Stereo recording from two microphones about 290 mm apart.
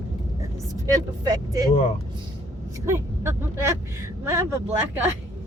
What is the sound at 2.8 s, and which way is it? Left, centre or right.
Speech, centre.